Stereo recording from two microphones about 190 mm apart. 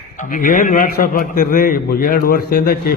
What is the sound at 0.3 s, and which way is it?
A man's voice, 45° left (ahead or behind).